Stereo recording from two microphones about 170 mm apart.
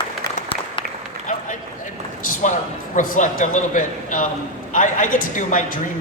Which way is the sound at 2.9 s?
50° left (ahead or behind).